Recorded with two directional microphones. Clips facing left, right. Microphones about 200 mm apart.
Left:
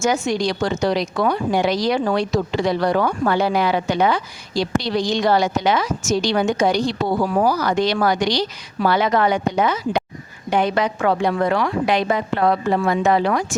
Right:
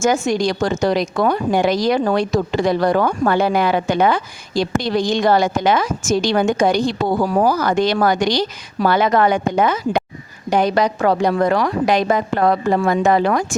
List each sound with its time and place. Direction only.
0.0 s a woman's voice: 45° right (ahead or behind)
10.5 s a woman's voice: 40° right (ahead or behind)